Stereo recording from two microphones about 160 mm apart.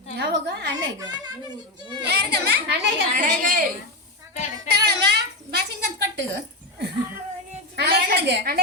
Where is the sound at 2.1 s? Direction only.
90° right.